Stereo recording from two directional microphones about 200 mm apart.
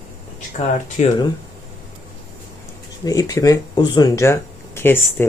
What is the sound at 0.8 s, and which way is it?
Speech, 40° left (ahead or behind).